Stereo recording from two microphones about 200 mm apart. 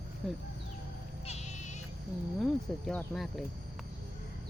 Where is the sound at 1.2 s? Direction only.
35° left (ahead or behind).